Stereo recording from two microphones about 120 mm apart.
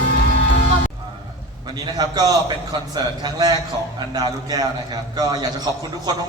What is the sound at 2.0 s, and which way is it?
A man's voice, 35° right (ahead or behind).